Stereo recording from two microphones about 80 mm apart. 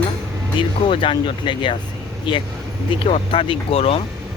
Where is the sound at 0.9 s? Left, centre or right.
Left.